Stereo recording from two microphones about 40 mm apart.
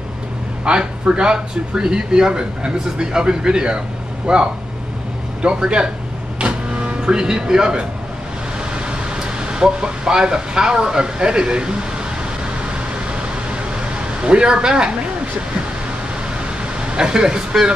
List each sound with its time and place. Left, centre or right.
0.7 s speech: right
6.4 s a sound: right
9.1 s speech: right
14.2 s speech: right
16.9 s speech: right